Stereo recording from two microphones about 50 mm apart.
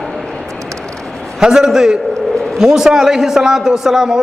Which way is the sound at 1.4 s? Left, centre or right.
Centre.